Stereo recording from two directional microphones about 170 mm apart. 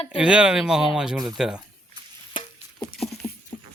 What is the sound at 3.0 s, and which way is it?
Patter, centre (ahead or behind).